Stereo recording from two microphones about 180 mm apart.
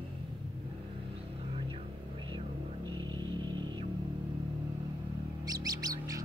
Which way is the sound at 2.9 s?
25° right (ahead or behind).